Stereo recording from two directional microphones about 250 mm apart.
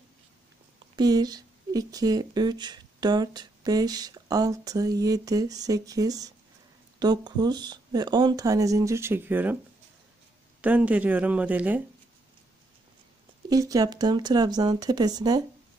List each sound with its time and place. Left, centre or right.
0.9 s speech: centre
10.6 s speech: centre
13.5 s speech: centre